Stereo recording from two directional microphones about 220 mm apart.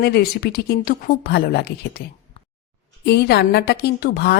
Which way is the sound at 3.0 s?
50° left (ahead or behind).